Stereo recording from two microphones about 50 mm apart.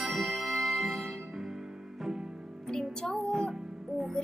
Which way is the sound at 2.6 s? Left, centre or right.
Centre.